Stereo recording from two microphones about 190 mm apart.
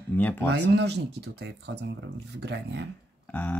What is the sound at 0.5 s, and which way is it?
Speech, 65° right (ahead or behind).